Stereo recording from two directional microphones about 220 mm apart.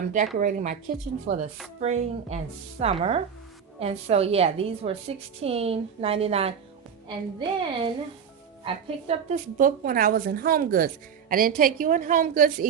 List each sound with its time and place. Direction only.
0.3 s a woman's voice: 35° right (ahead or behind)